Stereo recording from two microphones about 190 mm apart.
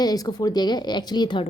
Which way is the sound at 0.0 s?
20° left (ahead or behind).